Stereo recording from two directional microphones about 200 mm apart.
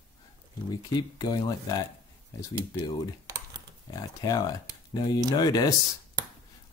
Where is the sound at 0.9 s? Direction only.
20° left (ahead or behind).